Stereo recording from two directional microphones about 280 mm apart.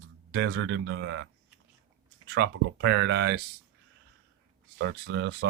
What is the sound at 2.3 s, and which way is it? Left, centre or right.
Speech, right.